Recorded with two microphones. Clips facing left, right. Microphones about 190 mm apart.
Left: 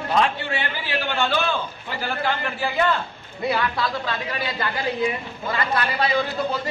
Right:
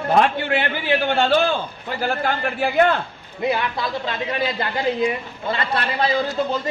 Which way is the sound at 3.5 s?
20° right (ahead or behind).